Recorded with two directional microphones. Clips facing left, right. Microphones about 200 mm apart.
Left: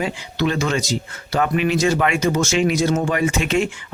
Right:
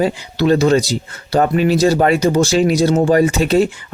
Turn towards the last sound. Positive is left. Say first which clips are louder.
# right 6 dB
turn(degrees=-35)  # may be behind; listen again after turning